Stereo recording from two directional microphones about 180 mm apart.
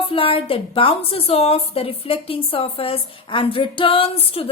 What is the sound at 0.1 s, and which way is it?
A woman's voice, 30° left (ahead or behind).